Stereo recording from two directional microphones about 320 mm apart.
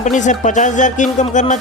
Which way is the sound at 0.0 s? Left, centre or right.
Left.